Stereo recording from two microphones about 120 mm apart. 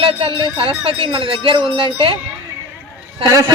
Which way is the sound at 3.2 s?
30° right (ahead or behind).